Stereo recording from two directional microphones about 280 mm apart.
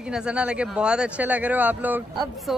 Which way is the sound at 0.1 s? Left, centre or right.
Centre.